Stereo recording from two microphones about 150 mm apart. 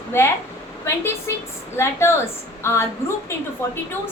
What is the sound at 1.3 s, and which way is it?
A woman's voice, 20° left (ahead or behind).